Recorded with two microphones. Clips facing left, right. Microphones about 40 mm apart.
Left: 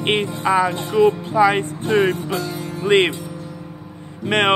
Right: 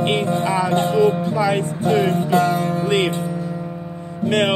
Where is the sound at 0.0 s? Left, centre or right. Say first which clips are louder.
Even; left.